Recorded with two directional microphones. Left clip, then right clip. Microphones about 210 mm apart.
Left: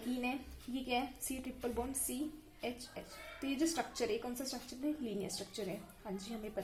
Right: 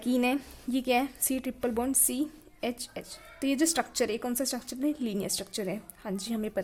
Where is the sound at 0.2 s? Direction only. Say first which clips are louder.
Right 12 dB; 45° right (ahead or behind).